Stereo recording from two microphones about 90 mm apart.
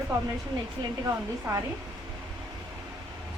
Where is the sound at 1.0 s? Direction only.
35° right (ahead or behind).